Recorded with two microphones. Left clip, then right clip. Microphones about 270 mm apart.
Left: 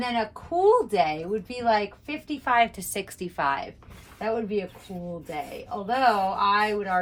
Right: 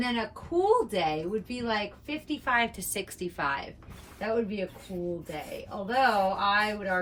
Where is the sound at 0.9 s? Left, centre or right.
Centre.